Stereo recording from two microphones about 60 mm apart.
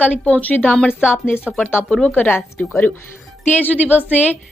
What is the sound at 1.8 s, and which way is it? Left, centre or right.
Speech, centre.